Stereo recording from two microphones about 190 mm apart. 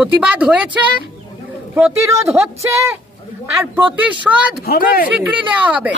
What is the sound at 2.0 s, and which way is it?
A woman's voice, 15° right (ahead or behind).